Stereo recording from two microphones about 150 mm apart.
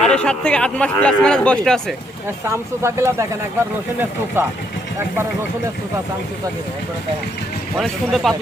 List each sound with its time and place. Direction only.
0.0 s speech: 5° left (ahead or behind)
2.5 s speech: 20° right (ahead or behind)
4.4 s speech: 15° right (ahead or behind)
7.8 s speech: centre (ahead or behind)